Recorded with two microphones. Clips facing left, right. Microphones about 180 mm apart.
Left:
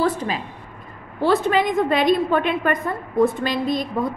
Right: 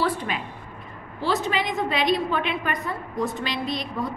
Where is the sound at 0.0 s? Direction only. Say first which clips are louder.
Left 4 dB; 40° left (ahead or behind).